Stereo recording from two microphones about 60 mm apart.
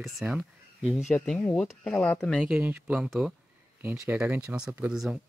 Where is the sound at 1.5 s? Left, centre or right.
Centre.